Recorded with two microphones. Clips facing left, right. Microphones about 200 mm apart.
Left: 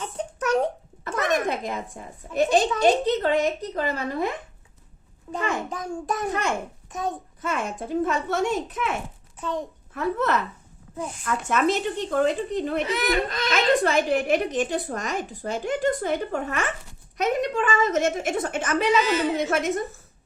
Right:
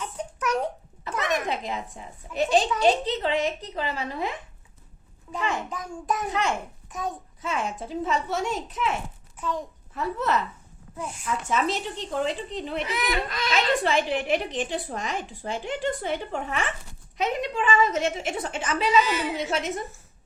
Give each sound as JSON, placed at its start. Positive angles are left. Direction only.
{"t": 0.0, "sound": "a sound", "side_deg": 30}
{"t": 1.0, "sound": "a woman's voice", "side_deg": 50}
{"t": 5.7, "sound": "a child's voice", "side_deg": 35}
{"t": 6.2, "sound": "a woman's voice", "side_deg": 50}
{"t": 10.9, "sound": "a child's voice", "side_deg": 35}
{"t": 11.3, "sound": "a woman's voice", "side_deg": 55}